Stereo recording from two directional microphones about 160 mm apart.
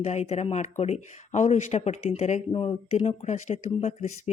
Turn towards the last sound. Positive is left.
turn(degrees=45)  # may be behind; listen again after turning